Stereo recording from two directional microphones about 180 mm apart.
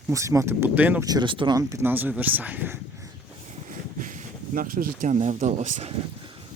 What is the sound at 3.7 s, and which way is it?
Speech, 45° right (ahead or behind).